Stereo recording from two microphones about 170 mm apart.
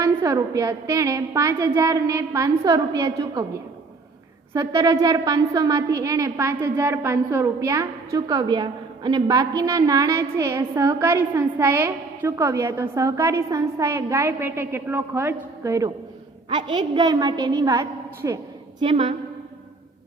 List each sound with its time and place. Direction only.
0.0 s a woman's voice: 15° right (ahead or behind)
4.5 s a woman's voice: 20° right (ahead or behind)
18.8 s a woman's voice: 30° right (ahead or behind)